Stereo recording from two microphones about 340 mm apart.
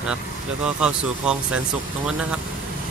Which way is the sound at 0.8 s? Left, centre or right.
Centre.